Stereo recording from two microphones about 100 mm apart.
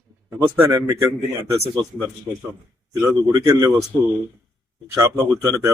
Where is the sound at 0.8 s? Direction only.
25° right (ahead or behind).